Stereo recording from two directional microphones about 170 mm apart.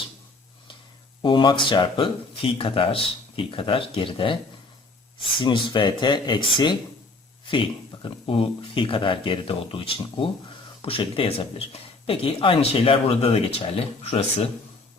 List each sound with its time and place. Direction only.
1.2 s speech: 30° left (ahead or behind)
5.4 s speech: 25° left (ahead or behind)